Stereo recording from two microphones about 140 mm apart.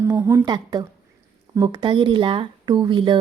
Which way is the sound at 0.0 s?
20° right (ahead or behind).